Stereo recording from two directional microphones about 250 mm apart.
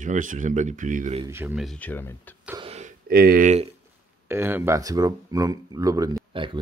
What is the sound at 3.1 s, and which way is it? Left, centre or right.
Speech, right.